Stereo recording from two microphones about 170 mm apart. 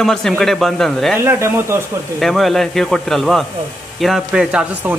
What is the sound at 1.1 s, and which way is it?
Speech, 15° right (ahead or behind).